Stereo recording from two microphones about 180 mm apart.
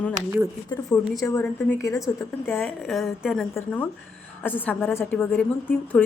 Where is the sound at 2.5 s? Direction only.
5° left (ahead or behind).